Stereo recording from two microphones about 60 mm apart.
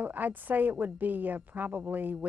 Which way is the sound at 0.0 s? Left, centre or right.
Right.